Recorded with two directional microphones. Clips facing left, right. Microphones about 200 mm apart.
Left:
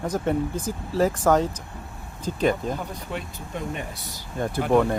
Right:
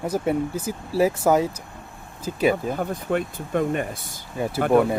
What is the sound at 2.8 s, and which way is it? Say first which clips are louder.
Speech: right 8 dB; 50° right (ahead or behind).